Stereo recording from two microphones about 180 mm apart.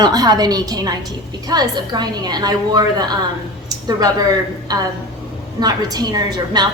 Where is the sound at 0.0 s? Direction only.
20° right (ahead or behind).